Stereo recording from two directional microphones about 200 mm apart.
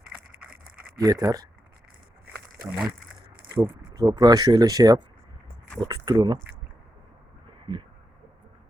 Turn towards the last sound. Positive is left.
turn(degrees=-25)  # may be behind; listen again after turning